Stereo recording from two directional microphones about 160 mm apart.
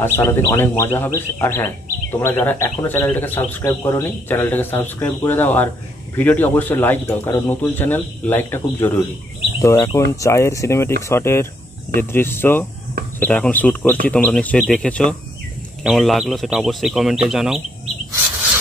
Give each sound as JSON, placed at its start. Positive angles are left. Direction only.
{"t": 0.0, "sound": "speech", "side_deg": 15}